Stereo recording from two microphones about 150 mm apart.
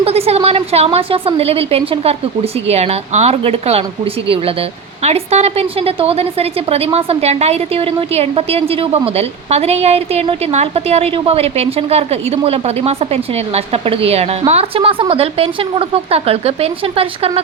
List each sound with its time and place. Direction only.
0.0 s a woman's voice: 45° right (ahead or behind)
5.0 s a woman's voice: 45° right (ahead or behind)